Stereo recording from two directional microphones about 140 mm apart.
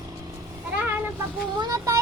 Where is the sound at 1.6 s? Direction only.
25° right (ahead or behind).